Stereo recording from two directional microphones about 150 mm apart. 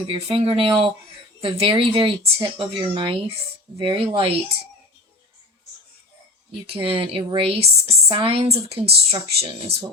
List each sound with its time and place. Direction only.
0.1 s speech: 35° right (ahead or behind)
6.7 s speech: 35° right (ahead or behind)